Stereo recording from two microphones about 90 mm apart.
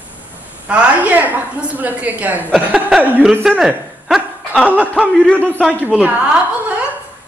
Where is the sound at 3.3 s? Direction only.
5° right (ahead or behind).